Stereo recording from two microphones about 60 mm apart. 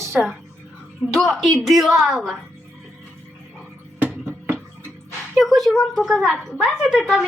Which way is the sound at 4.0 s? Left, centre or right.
Right.